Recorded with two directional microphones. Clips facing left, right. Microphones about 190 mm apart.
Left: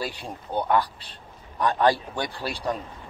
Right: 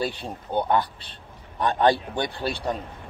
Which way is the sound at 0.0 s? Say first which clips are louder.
Right 4 dB; 25° right (ahead or behind).